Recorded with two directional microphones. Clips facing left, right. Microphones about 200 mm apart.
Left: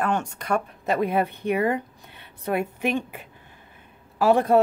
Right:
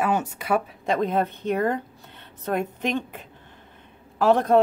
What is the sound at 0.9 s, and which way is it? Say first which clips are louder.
A woman's voice: even; 10° left (ahead or behind).